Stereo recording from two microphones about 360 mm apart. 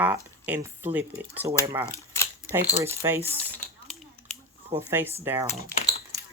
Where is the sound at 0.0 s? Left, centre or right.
Centre.